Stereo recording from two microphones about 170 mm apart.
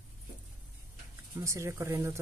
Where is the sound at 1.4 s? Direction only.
15° right (ahead or behind).